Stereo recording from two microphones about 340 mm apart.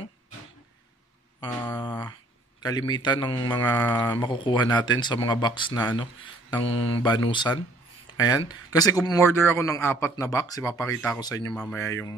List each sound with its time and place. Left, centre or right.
1.4 s mantra: centre
2.6 s speech: centre